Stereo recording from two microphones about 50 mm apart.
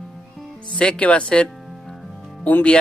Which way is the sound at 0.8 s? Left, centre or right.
Left.